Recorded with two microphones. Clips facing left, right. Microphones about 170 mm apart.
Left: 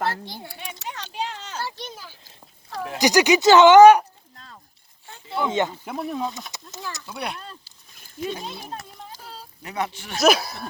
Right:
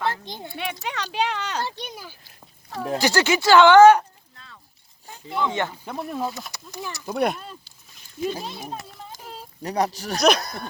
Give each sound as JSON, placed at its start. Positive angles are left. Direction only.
{"t": 0.1, "sound": "speech", "side_deg": -20}
{"t": 0.5, "sound": "speech", "side_deg": -75}
{"t": 1.6, "sound": "a child's voice", "side_deg": -15}
{"t": 3.0, "sound": "speech", "side_deg": 15}
{"t": 5.4, "sound": "speech", "side_deg": 20}
{"t": 5.9, "sound": "speech", "side_deg": 0}
{"t": 7.0, "sound": "speech", "side_deg": -45}
{"t": 7.3, "sound": "a child's voice", "side_deg": -5}
{"t": 8.7, "sound": "a sound", "side_deg": 0}
{"t": 9.6, "sound": "speech", "side_deg": -40}
{"t": 10.2, "sound": "speech", "side_deg": 5}